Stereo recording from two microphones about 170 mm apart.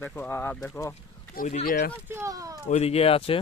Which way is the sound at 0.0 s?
10° left (ahead or behind).